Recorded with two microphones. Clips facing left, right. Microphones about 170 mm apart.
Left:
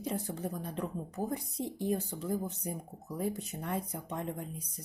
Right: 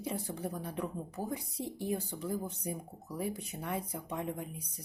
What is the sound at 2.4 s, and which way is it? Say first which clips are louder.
Speech: left 1 dB; 10° right (ahead or behind).